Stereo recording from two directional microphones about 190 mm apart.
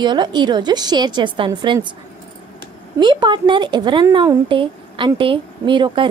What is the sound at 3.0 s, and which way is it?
Speech, 25° right (ahead or behind).